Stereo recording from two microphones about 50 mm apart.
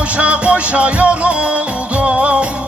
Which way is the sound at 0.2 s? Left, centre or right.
Right.